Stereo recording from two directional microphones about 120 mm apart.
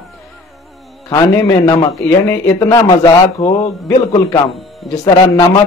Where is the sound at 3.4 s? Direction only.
55° left (ahead or behind).